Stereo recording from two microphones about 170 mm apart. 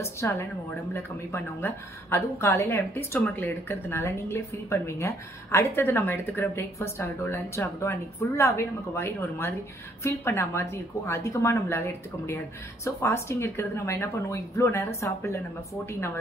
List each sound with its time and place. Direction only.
0.0 s a woman's voice: 15° left (ahead or behind)